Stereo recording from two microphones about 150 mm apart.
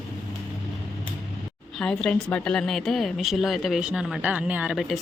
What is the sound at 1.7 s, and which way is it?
A woman's voice, 5° left (ahead or behind).